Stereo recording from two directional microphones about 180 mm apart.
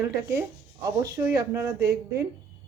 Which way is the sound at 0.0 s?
15° right (ahead or behind).